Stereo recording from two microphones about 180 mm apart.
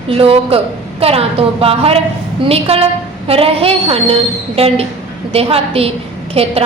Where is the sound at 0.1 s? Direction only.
30° right (ahead or behind).